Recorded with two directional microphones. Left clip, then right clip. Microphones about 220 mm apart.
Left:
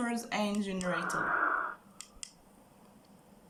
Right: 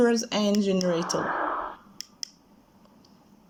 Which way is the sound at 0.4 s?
20° right (ahead or behind).